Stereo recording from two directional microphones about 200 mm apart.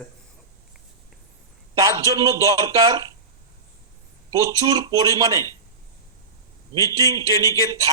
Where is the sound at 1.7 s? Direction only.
15° right (ahead or behind).